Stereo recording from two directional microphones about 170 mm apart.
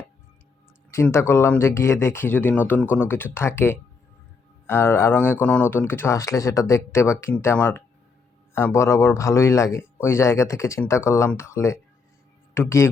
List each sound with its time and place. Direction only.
0.9 s speech: 15° left (ahead or behind)